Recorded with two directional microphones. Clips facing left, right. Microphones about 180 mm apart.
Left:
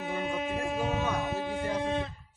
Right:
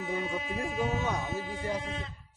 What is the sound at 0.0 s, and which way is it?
Music, 60° left (ahead or behind).